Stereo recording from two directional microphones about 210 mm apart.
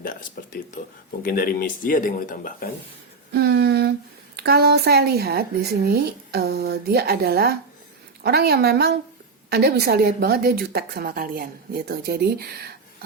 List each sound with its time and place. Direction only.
0.0 s speech: 40° left (ahead or behind)
3.3 s a sound: 50° right (ahead or behind)
4.4 s a woman's voice: 50° right (ahead or behind)